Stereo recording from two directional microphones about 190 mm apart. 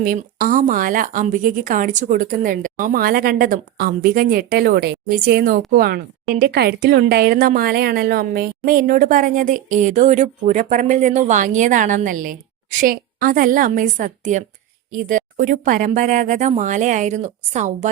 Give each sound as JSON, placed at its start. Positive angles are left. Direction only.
{"t": 0.0, "sound": "speech", "side_deg": -45}